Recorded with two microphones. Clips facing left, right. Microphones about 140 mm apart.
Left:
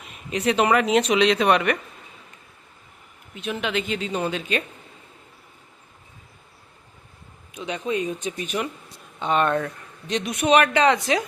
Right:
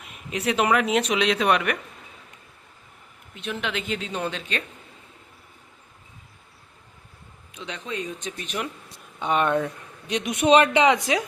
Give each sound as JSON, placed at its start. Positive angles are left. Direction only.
{"t": 0.3, "sound": "speech", "side_deg": -5}
{"t": 3.3, "sound": "speech", "side_deg": 5}
{"t": 7.5, "sound": "speech", "side_deg": 10}
{"t": 9.1, "sound": "speech", "side_deg": -10}
{"t": 10.3, "sound": "speech", "side_deg": -25}